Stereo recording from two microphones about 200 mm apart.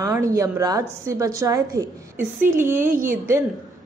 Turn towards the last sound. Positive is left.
turn(degrees=-15)  # may be behind; listen again after turning